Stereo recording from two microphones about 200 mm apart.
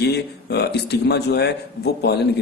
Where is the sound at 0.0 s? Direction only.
55° left (ahead or behind).